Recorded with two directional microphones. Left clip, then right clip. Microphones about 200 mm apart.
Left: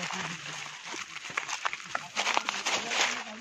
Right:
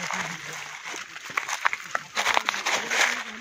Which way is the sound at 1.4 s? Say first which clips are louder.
Right 7 dB; 45° right (ahead or behind).